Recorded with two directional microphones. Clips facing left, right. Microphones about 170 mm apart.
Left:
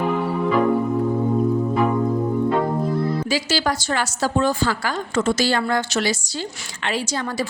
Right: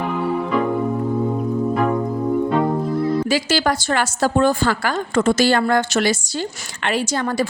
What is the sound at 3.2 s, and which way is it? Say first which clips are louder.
A woman's voice: right 3 dB; 55° right (ahead or behind).